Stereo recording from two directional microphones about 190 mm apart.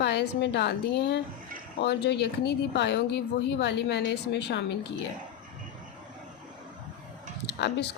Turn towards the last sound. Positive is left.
turn(degrees=65)  # may be behind; listen again after turning